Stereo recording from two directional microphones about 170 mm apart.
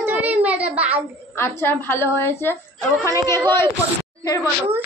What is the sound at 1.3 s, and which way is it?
A woman's voice, 15° left (ahead or behind).